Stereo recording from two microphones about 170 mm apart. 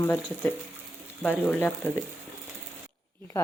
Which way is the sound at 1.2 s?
10° left (ahead or behind).